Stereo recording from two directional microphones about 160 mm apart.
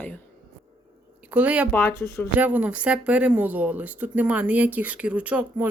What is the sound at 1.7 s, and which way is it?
Speech, 15° left (ahead or behind).